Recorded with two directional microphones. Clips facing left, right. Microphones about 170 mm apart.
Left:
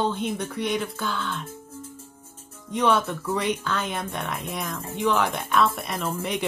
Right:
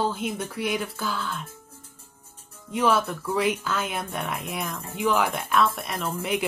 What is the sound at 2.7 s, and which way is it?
Speech, centre (ahead or behind).